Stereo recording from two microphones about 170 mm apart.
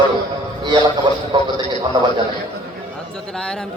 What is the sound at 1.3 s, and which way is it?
Speech, 25° right (ahead or behind).